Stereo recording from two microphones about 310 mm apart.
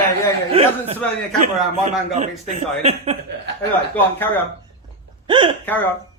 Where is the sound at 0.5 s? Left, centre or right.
Centre.